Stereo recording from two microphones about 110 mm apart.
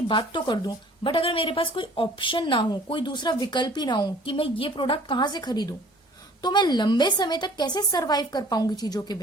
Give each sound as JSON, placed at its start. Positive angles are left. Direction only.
{"t": 0.1, "sound": "a woman's voice", "side_deg": 45}